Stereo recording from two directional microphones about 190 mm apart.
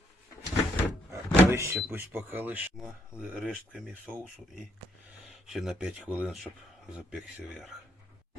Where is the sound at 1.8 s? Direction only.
Centre (ahead or behind).